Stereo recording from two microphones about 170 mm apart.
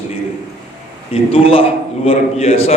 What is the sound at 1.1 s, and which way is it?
A man's voice, 35° left (ahead or behind).